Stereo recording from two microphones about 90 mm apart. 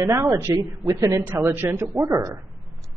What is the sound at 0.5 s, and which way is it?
Speech, 35° right (ahead or behind).